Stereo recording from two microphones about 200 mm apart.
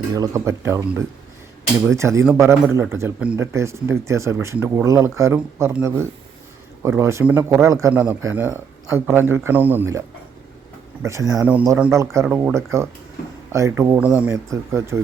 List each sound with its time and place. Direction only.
0.2 s speech: 15° right (ahead or behind)
11.0 s speech: 15° right (ahead or behind)